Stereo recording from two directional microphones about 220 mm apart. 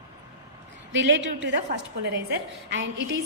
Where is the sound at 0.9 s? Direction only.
55° right (ahead or behind).